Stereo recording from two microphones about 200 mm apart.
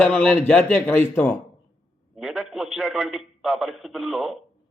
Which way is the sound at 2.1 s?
Centre (ahead or behind).